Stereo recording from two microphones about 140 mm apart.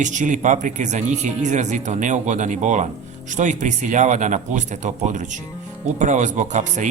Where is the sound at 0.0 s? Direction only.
60° right (ahead or behind).